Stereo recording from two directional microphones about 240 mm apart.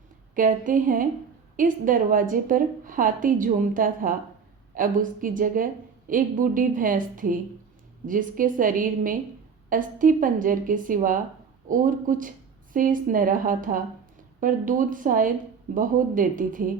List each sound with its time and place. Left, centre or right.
0.3 s a woman's voice: right